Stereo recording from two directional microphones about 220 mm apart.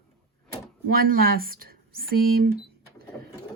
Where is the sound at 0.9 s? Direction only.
45° right (ahead or behind).